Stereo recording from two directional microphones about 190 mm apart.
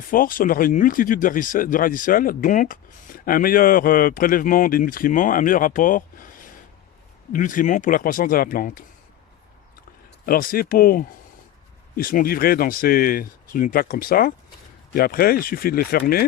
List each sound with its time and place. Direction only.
0.1 s speech: 45° left (ahead or behind)
10.2 s speech: 50° left (ahead or behind)